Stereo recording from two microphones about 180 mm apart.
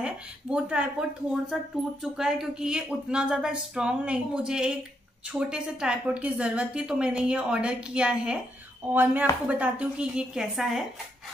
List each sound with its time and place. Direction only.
0.0 s a woman's voice: 5° right (ahead or behind)